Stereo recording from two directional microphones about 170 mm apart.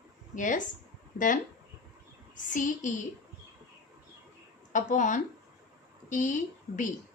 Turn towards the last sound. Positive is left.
turn(degrees=50)  # may be behind; listen again after turning